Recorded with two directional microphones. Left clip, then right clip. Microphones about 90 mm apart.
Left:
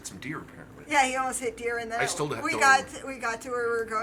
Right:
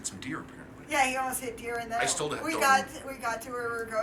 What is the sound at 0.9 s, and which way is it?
A woman's voice, 20° left (ahead or behind).